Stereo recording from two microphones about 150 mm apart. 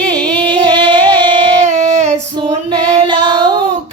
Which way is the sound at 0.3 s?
30° right (ahead or behind).